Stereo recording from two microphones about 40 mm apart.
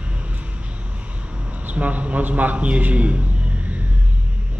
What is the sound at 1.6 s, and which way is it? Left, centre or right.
A man's voice, right.